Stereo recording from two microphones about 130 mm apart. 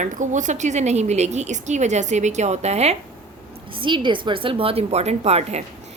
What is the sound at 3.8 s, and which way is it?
A woman's voice, 40° right (ahead or behind).